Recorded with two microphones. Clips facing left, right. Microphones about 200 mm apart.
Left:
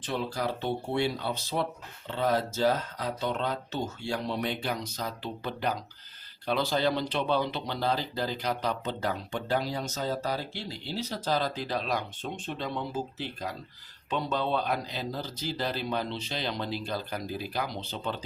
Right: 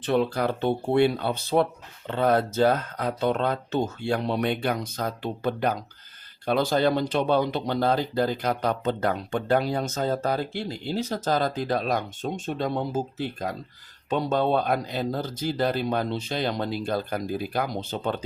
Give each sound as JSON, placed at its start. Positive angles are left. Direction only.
{"t": 0.0, "sound": "speech", "side_deg": -60}